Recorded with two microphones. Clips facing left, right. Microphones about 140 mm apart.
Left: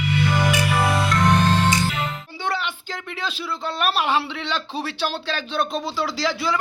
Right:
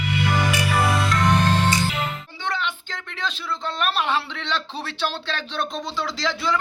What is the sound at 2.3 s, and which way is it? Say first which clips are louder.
Speech: left 2 dB; 10° left (ahead or behind).